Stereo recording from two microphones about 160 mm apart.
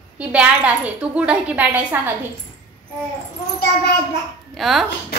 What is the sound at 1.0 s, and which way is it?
A woman's voice, 5° right (ahead or behind).